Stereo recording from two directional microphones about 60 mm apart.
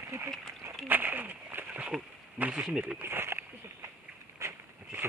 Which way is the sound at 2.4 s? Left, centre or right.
Right.